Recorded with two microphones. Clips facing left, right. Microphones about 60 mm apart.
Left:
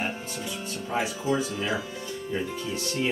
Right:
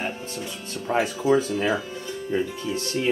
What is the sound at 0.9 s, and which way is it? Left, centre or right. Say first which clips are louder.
Speech: right 5 dB; right.